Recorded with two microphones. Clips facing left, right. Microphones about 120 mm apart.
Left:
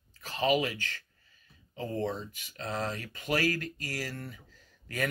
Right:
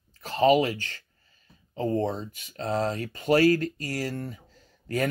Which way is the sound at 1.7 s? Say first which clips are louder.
Right 6 dB; 35° right (ahead or behind).